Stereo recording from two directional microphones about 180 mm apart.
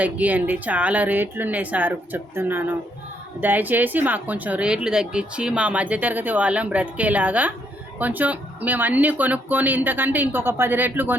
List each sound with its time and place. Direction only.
0.0 s speech: 10° right (ahead or behind)